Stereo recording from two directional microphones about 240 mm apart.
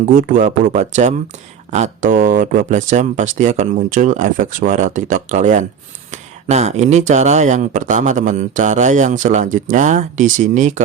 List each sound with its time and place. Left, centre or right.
0.0 s speech: right